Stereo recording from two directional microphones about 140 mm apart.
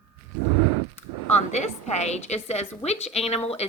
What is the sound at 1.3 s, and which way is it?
A woman's voice, 50° left (ahead or behind).